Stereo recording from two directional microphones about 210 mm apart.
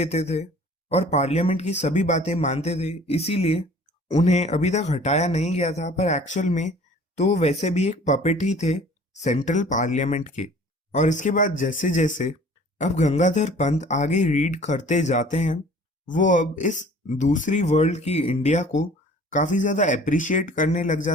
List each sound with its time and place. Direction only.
0.0 s speech: 30° left (ahead or behind)